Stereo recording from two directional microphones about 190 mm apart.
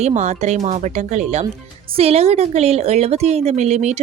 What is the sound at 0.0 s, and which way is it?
A woman's voice, 35° right (ahead or behind).